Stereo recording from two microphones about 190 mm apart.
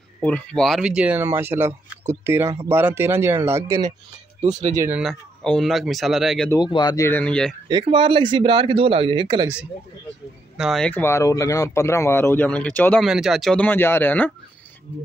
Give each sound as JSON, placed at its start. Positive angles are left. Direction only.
{"t": 0.2, "sound": "speech", "side_deg": 5}
{"t": 5.0, "sound": "speech", "side_deg": 5}
{"t": 6.5, "sound": "speech", "side_deg": 20}
{"t": 7.1, "sound": "speech", "side_deg": 5}
{"t": 7.6, "sound": "speech", "side_deg": -25}
{"t": 10.6, "sound": "speech", "side_deg": 0}